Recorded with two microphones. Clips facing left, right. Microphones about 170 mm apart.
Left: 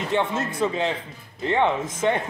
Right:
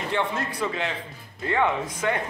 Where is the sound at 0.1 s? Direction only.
20° left (ahead or behind).